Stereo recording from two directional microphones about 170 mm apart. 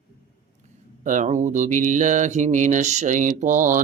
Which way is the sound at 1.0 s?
45° right (ahead or behind).